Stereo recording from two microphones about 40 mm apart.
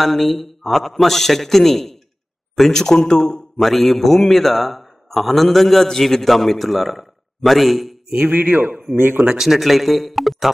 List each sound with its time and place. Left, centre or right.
0.0 s a man's voice: centre
3.5 s a man's voice: centre
8.3 s a man's voice: right
8.9 s speech: right
9.2 s speech: centre
9.5 s a man's voice: centre